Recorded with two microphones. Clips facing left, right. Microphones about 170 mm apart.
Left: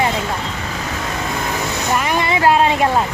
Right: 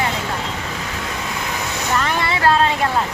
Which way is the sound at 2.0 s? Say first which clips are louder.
Left 3 dB; 15° left (ahead or behind).